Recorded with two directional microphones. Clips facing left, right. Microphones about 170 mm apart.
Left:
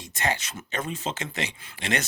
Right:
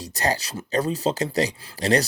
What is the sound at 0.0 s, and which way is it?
Speech, 40° right (ahead or behind).